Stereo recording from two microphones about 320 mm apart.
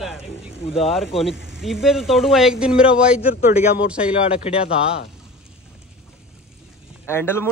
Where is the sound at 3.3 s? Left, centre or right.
Left.